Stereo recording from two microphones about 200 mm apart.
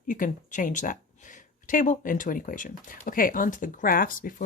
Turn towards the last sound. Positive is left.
turn(degrees=45)  # may be behind; listen again after turning